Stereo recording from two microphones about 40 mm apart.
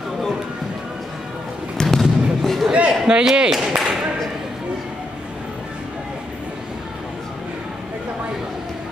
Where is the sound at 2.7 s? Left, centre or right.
Right.